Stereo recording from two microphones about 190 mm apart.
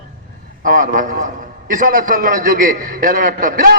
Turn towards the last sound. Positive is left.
turn(degrees=-50)  # may be behind; listen again after turning